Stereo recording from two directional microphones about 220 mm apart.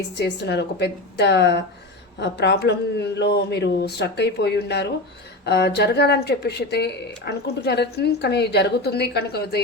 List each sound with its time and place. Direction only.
0.2 s speech: 50° left (ahead or behind)